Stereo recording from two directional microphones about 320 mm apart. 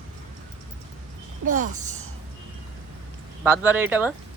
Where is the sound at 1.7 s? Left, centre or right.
Right.